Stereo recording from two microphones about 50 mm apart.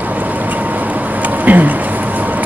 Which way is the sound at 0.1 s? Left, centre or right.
Right.